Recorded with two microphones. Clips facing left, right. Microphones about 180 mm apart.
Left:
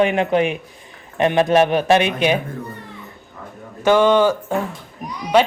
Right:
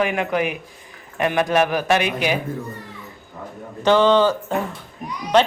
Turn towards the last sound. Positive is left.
turn(degrees=10)  # may be behind; listen again after turning